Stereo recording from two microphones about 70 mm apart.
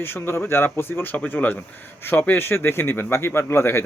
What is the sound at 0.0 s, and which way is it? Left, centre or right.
Speech, left.